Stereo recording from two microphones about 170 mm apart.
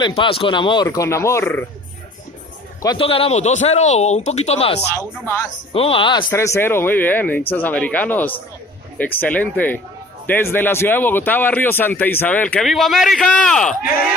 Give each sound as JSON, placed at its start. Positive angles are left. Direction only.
{"t": 0.0, "sound": "speech", "side_deg": 30}
{"t": 3.0, "sound": "speech", "side_deg": 35}
{"t": 4.9, "sound": "a man's voice", "side_deg": 15}
{"t": 5.7, "sound": "speech", "side_deg": 35}
{"t": 6.3, "sound": "a man's voice", "side_deg": 15}